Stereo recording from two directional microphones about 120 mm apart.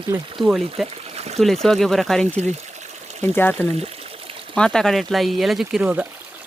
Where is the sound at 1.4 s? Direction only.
Centre (ahead or behind).